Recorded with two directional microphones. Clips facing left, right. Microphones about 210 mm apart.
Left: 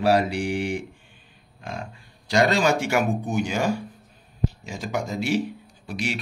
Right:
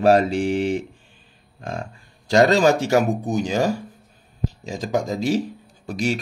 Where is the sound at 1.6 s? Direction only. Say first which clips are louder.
Right 4 dB; 40° right (ahead or behind).